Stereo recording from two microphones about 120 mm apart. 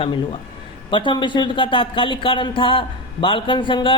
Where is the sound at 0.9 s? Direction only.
45° left (ahead or behind).